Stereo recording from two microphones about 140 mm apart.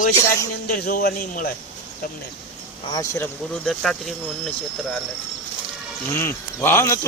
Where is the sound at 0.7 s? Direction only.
90° left.